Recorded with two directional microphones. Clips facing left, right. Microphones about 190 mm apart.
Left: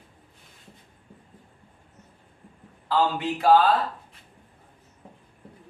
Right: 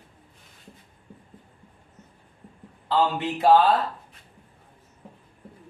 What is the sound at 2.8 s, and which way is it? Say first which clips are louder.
Speech: right 1 dB; 20° right (ahead or behind).